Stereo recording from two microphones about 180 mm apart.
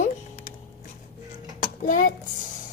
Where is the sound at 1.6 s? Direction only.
50° left (ahead or behind).